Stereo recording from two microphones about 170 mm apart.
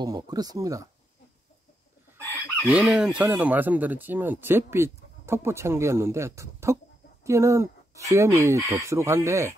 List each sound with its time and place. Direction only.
0.0 s speech: 20° right (ahead or behind)
2.7 s speech: 5° right (ahead or behind)